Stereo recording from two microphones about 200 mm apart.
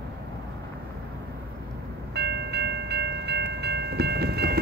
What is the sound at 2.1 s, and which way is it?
Train, 55° right (ahead or behind).